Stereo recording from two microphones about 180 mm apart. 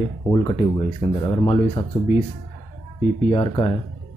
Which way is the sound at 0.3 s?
30° left (ahead or behind).